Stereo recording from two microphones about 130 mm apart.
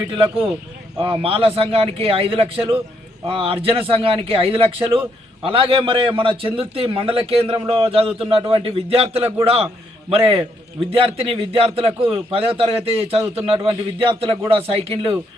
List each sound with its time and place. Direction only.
0.1 s a man's voice: 45° right (ahead or behind)